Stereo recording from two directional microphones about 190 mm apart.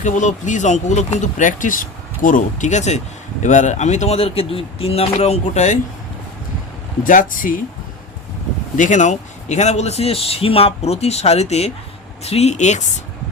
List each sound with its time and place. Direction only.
0.0 s a man's voice: 40° left (ahead or behind)
7.0 s speech: 45° left (ahead or behind)
8.7 s a man's voice: 40° left (ahead or behind)